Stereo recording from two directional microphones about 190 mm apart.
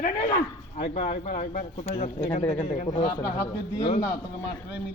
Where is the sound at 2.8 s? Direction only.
20° left (ahead or behind).